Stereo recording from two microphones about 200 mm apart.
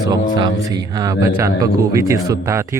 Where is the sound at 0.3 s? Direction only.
20° right (ahead or behind).